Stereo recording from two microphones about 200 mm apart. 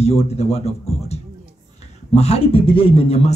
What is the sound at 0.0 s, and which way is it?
A man's voice, 30° left (ahead or behind).